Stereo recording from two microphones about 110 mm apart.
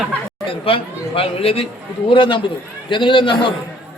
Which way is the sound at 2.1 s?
50° left (ahead or behind).